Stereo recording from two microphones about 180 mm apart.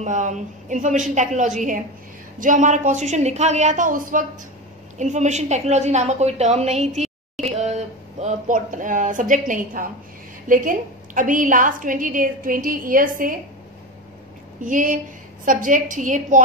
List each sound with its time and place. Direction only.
0.0 s a woman's voice: 45° right (ahead or behind)
14.6 s a woman's voice: 45° right (ahead or behind)